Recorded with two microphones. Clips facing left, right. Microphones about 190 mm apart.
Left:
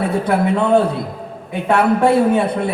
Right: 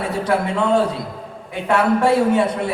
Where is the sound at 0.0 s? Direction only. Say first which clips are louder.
Left 3 dB; 60° left (ahead or behind).